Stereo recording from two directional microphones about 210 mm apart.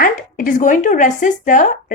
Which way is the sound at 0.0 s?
40° left (ahead or behind).